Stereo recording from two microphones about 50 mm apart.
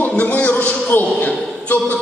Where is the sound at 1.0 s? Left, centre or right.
Left.